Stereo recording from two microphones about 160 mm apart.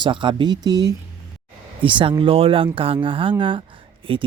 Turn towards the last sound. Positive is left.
turn(degrees=-30)  # may be behind; listen again after turning